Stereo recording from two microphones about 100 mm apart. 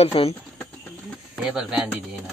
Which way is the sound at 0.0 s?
70° left (ahead or behind).